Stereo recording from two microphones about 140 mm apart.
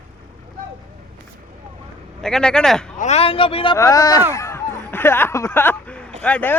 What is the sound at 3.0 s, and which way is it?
Speech, 50° left (ahead or behind).